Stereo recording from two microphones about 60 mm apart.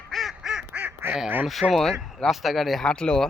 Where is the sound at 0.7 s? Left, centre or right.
Right.